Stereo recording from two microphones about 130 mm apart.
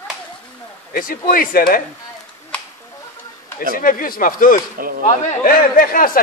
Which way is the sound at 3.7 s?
90° left.